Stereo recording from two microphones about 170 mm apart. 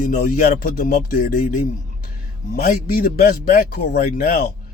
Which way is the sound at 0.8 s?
65° left (ahead or behind).